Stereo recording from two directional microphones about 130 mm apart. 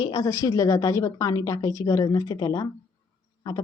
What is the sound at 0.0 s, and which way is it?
A woman's voice, 30° left (ahead or behind).